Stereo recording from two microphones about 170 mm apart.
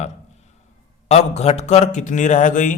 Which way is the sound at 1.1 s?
40° left (ahead or behind).